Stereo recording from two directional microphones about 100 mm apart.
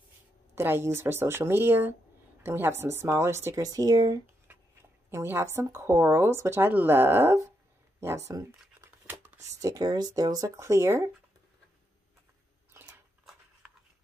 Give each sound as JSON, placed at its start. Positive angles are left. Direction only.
{"t": 0.6, "sound": "speech", "side_deg": -25}
{"t": 3.6, "sound": "speech", "side_deg": -40}
{"t": 4.5, "sound": "a sound", "side_deg": -20}
{"t": 5.1, "sound": "speech", "side_deg": -25}
{"t": 8.0, "sound": "crumpling", "side_deg": -30}
{"t": 9.6, "sound": "speech", "side_deg": -35}
{"t": 10.6, "sound": "speech", "side_deg": -30}
{"t": 12.7, "sound": "a sound", "side_deg": -25}